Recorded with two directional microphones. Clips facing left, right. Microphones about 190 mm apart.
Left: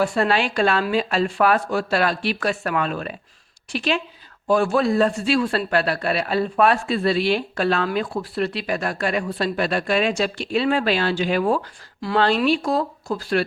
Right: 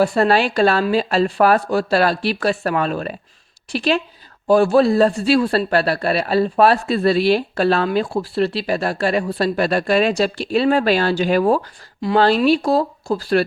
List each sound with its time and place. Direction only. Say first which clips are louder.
0.0 s speech: right 4 dB; 35° right (ahead or behind)